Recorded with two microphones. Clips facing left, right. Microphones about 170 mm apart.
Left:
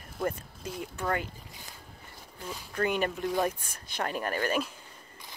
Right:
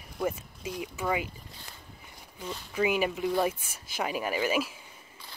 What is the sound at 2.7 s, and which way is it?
Speech, 5° right (ahead or behind).